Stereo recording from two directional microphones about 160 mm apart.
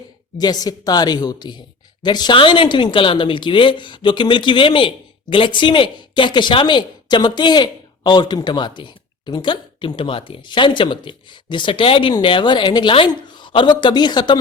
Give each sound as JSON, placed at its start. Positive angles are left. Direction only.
{"t": 0.3, "sound": "speech", "side_deg": 25}